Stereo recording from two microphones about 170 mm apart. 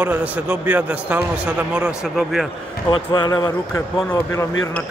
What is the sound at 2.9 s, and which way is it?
Speech, 25° left (ahead or behind).